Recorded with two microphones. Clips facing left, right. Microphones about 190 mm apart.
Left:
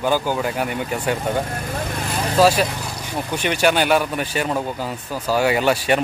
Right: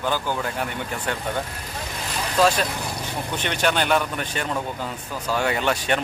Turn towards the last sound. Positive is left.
turn(degrees=10)  # may be behind; listen again after turning